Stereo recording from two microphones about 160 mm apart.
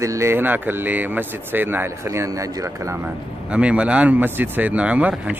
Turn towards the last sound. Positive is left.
turn(degrees=-10)  # may be behind; listen again after turning